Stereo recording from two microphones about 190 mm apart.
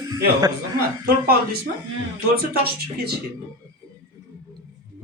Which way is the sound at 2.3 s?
55° right (ahead or behind).